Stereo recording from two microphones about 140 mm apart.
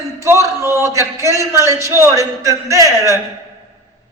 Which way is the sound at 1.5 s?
20° right (ahead or behind).